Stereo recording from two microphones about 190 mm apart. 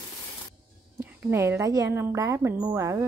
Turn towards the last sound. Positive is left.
turn(degrees=-15)  # may be behind; listen again after turning